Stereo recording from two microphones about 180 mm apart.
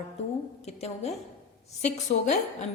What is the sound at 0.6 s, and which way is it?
Speech, 35° left (ahead or behind).